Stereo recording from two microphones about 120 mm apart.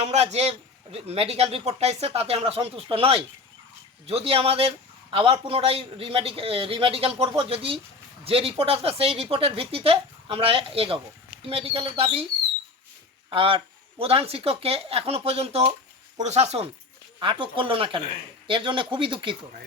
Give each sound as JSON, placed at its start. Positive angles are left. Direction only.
{"t": 0.0, "sound": "a man's voice", "side_deg": -65}
{"t": 13.3, "sound": "a man's voice", "side_deg": -45}
{"t": 16.2, "sound": "a man's voice", "side_deg": -65}
{"t": 17.2, "sound": "speech", "side_deg": -40}